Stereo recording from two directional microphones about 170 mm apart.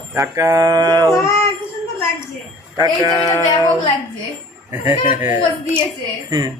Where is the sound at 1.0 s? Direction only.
15° left (ahead or behind).